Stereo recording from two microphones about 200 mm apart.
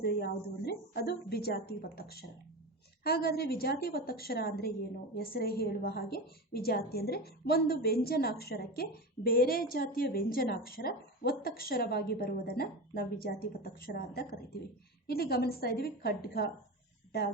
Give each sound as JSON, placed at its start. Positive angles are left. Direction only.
{"t": 0.0, "sound": "a woman's voice", "side_deg": 50}